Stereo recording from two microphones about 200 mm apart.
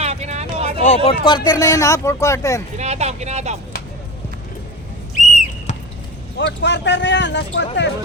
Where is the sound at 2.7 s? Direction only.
35° right (ahead or behind).